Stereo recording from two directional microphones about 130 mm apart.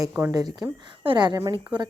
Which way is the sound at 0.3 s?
30° right (ahead or behind).